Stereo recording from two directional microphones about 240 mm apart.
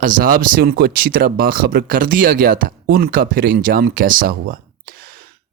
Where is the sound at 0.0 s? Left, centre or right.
Right.